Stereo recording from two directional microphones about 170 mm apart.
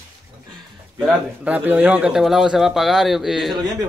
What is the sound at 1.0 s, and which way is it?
Speech, 10° right (ahead or behind).